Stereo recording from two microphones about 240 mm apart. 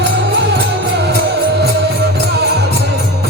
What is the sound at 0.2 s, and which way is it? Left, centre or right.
Music, right.